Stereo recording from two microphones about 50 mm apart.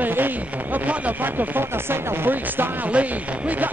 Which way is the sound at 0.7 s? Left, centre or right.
Right.